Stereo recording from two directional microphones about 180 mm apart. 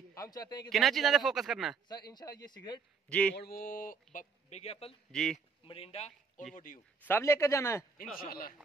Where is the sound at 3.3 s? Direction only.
60° left (ahead or behind); by 6.4 s 35° left (ahead or behind).